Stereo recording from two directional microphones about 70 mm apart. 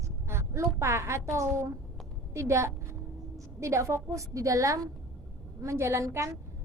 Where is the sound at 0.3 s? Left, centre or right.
Right.